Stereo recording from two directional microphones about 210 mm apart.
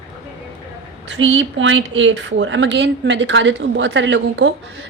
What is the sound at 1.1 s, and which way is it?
Speech, 60° right (ahead or behind).